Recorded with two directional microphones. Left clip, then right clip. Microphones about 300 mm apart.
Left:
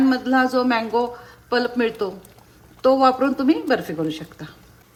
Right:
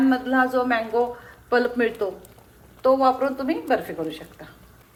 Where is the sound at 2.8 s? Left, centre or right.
Centre.